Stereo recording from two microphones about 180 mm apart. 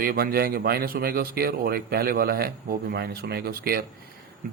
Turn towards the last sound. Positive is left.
turn(degrees=-55)  # may be behind; listen again after turning